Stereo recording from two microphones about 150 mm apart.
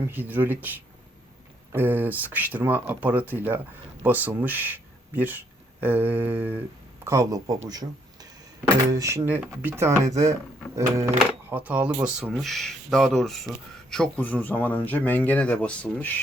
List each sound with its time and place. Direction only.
0.0 s speech: 15° right (ahead or behind)
1.7 s speech: 15° right (ahead or behind)
10.1 s a sound: 20° right (ahead or behind)
11.4 s speech: 10° right (ahead or behind); by 16.0 s 10° left (ahead or behind)